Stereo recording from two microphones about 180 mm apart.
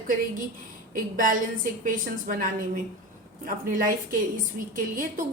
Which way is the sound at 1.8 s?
50° right (ahead or behind).